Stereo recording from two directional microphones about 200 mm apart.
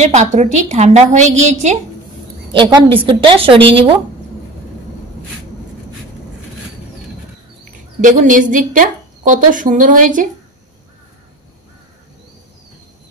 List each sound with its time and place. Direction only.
0.0 s a woman's voice: 35° right (ahead or behind)
2.5 s a woman's voice: 25° right (ahead or behind)
8.0 s a woman's voice: 40° right (ahead or behind)